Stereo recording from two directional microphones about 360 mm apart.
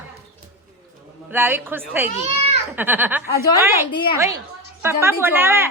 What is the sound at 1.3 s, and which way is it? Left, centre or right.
Speech, centre.